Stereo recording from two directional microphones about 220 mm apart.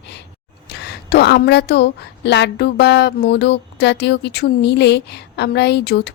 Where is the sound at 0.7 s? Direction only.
50° left (ahead or behind).